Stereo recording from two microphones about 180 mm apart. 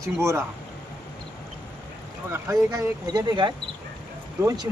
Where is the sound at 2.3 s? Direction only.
15° right (ahead or behind).